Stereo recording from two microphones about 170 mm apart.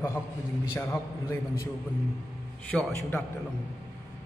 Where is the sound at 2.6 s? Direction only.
10° left (ahead or behind).